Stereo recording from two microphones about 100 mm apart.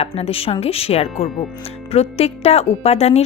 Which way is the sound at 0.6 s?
85° left.